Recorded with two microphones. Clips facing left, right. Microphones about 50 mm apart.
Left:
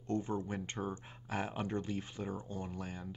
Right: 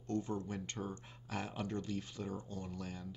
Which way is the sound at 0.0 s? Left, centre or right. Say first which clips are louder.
Left 2 dB; left.